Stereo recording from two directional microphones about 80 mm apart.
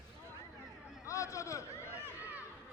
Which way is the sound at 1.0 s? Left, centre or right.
Left.